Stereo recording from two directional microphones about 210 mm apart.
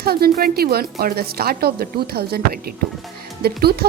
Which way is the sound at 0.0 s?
45° right (ahead or behind).